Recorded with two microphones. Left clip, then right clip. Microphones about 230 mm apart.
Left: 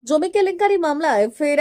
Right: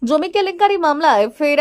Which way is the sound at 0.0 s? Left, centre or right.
Centre.